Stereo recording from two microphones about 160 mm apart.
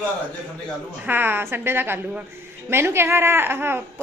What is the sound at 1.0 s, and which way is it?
A woman's voice, 10° right (ahead or behind).